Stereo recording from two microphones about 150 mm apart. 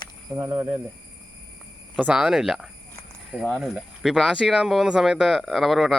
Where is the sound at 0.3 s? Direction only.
25° right (ahead or behind).